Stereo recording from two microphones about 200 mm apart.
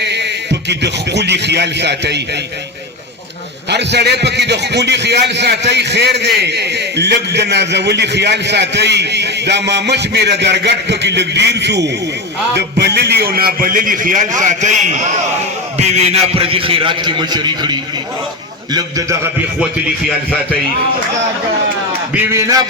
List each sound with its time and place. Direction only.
0.0 s a sound: 60° right (ahead or behind)
0.7 s a man's voice: 60° right (ahead or behind)
3.7 s a man's voice: 55° right (ahead or behind); by 15.0 s 35° right (ahead or behind)
16.3 s a man's voice: 30° right (ahead or behind)
22.1 s a man's voice: 15° right (ahead or behind)